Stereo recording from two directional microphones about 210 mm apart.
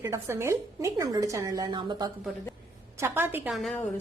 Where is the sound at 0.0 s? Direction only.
15° right (ahead or behind); by 3.8 s 5° left (ahead or behind).